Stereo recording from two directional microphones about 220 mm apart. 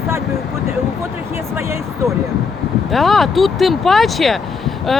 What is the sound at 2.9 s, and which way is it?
Speech, centre (ahead or behind).